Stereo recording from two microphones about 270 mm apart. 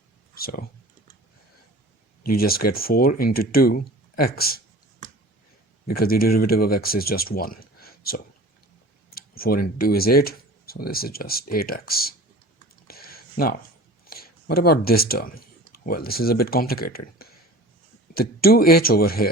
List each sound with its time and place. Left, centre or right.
0.3 s speech: left
2.3 s speech: left
5.9 s speech: left
12.9 s a sound: left
14.1 s speech: left